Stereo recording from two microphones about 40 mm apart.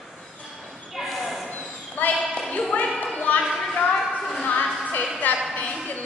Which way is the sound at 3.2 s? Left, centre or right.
Left.